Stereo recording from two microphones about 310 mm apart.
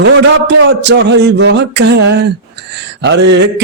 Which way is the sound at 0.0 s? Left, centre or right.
Right.